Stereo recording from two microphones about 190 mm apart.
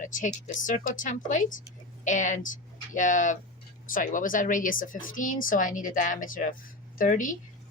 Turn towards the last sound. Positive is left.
turn(degrees=45)  # may be behind; listen again after turning